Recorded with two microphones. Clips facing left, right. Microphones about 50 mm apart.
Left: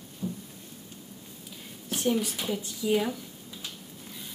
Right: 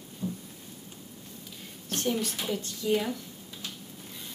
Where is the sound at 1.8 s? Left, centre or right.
Centre.